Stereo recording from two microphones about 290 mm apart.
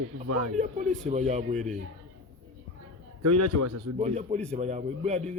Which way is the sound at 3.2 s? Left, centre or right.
Right.